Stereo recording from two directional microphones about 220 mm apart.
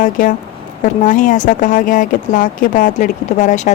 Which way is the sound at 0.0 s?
35° left (ahead or behind).